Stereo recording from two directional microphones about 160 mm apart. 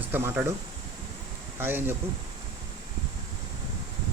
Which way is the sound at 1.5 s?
15° right (ahead or behind).